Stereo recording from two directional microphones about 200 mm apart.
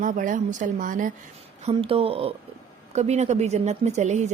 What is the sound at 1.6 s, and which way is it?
A woman's voice, 25° right (ahead or behind).